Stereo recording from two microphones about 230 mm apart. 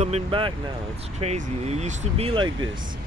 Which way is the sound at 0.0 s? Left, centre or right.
Right.